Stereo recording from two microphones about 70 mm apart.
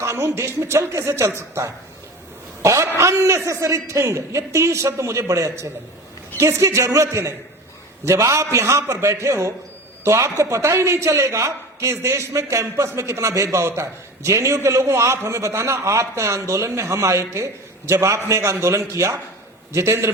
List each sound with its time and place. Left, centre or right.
0.0 s speech: right
2.6 s a sound: right
3.0 s a man's voice: right